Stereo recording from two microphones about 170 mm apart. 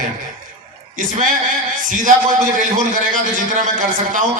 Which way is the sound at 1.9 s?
50° right (ahead or behind).